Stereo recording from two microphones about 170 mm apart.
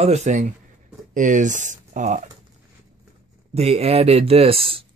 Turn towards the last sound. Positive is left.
turn(degrees=-35)  # may be behind; listen again after turning